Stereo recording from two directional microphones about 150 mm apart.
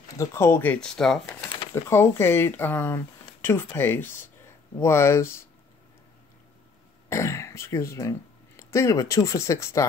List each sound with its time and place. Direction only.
0.2 s speech: 20° left (ahead or behind)
1.9 s speech: 15° left (ahead or behind)
7.1 s speech: 20° left (ahead or behind)